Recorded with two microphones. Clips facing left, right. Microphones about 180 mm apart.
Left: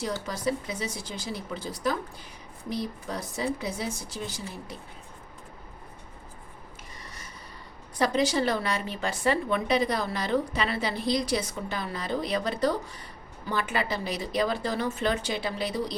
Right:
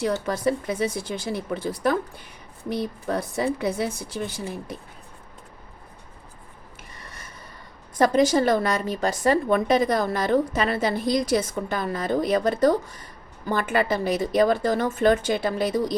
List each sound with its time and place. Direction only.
0.0 s speech: 55° right (ahead or behind)
7.0 s a sound: 55° right (ahead or behind)
7.9 s a woman's voice: 50° right (ahead or behind)